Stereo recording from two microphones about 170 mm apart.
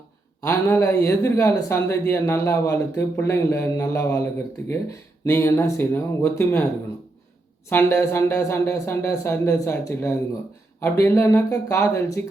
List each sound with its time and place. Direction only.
0.4 s speech: 15° left (ahead or behind)
7.7 s speech: 10° left (ahead or behind)